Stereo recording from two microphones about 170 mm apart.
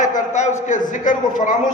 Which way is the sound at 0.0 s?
45° left (ahead or behind).